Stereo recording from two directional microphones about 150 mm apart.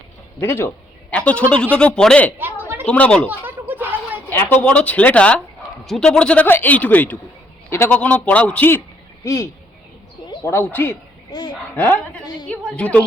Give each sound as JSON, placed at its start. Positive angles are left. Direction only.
{"t": 0.3, "sound": "a man's voice", "side_deg": 15}
{"t": 2.4, "sound": "a sound", "side_deg": -15}
{"t": 2.8, "sound": "a man's voice", "side_deg": 10}
{"t": 3.2, "sound": "a sound", "side_deg": -10}
{"t": 4.3, "sound": "a man's voice", "side_deg": 15}
{"t": 11.3, "sound": "speech", "side_deg": 25}
{"t": 12.5, "sound": "a man's voice", "side_deg": 10}